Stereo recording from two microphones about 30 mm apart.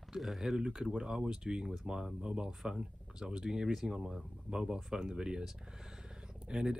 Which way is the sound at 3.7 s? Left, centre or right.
Centre.